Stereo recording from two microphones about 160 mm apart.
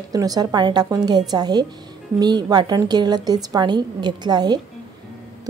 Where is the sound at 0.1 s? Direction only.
25° right (ahead or behind).